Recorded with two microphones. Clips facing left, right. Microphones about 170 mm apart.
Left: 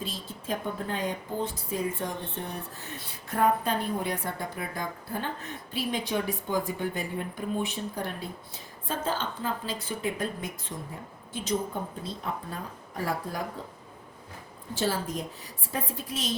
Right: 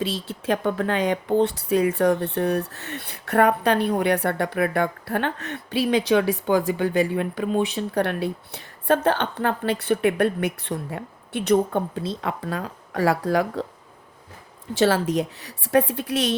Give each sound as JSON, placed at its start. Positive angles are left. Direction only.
{"t": 0.0, "sound": "speech", "side_deg": -75}
{"t": 14.8, "sound": "speech", "side_deg": -75}